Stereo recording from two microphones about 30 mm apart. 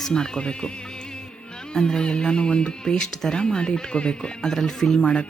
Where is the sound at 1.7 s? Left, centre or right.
Left.